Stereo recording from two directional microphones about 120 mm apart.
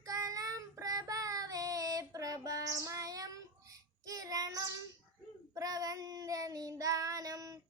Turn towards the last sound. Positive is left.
turn(degrees=-30)  # may be behind; listen again after turning